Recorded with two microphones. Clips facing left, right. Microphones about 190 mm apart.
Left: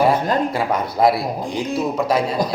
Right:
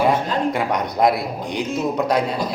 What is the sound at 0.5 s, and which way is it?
A man's voice, 5° left (ahead or behind).